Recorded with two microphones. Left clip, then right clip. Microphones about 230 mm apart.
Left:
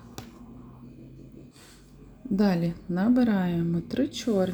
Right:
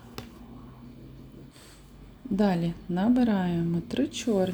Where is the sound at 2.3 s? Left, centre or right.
Centre.